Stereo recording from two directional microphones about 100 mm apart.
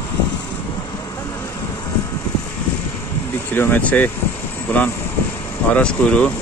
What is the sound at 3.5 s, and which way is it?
Speech, 20° left (ahead or behind).